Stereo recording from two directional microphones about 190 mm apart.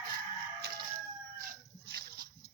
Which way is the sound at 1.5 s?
55° right (ahead or behind).